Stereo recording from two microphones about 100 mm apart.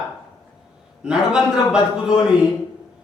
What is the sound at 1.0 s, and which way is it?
A man's voice, 10° right (ahead or behind).